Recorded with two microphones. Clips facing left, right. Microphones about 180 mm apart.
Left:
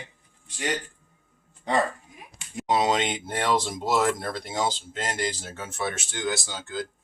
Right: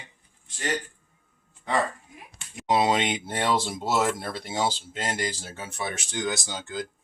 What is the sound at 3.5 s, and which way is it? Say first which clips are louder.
Speech: left 2 dB; 5° right (ahead or behind).